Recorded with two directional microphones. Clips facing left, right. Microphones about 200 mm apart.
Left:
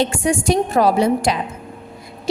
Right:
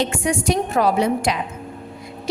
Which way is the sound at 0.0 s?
30° left (ahead or behind).